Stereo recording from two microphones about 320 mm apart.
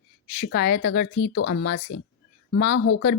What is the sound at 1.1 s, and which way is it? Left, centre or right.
Speech, left.